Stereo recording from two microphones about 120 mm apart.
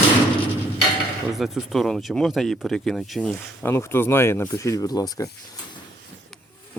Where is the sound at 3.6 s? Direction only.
20° left (ahead or behind).